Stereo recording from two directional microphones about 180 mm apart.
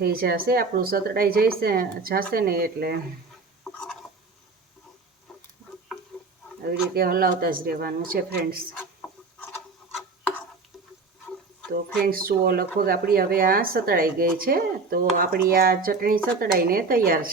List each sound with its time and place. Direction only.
0.0 s speech: 55° right (ahead or behind)
3.6 s a sound: 5° left (ahead or behind)
5.3 s tick-tock: centre (ahead or behind)
6.7 s speech: 55° right (ahead or behind)
8.8 s chicken: 10° left (ahead or behind)
12.0 s speech: 55° right (ahead or behind)